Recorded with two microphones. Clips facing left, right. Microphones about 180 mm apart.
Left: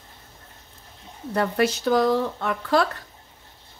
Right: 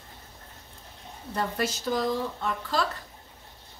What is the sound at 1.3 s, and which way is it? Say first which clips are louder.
Speech: left 7 dB; 65° left (ahead or behind).